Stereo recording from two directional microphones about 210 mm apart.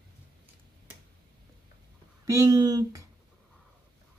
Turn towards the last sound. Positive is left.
turn(degrees=-15)  # may be behind; listen again after turning